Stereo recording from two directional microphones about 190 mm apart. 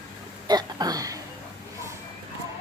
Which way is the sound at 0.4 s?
20° right (ahead or behind).